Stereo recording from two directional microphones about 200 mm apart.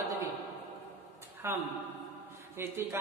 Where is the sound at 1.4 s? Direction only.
10° right (ahead or behind).